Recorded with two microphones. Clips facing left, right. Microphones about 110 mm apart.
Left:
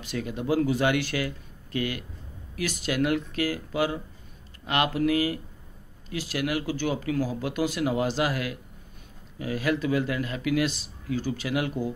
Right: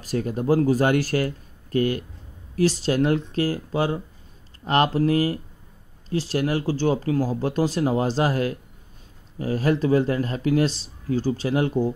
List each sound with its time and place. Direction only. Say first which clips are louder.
0.0 s speech: right 6 dB; 40° right (ahead or behind)